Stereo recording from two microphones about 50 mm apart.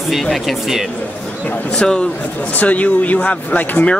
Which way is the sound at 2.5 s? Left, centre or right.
Left.